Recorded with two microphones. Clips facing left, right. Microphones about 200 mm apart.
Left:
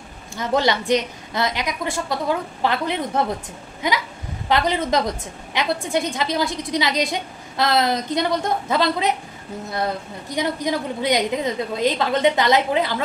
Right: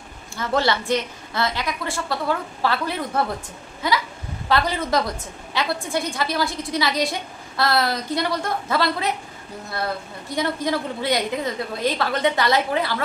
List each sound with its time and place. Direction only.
0.4 s a woman's voice: 15° left (ahead or behind)